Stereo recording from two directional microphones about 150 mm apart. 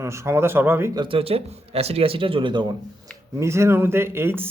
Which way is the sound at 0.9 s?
35° right (ahead or behind).